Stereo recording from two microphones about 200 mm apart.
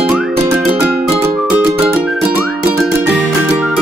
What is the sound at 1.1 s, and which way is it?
Music, 25° right (ahead or behind).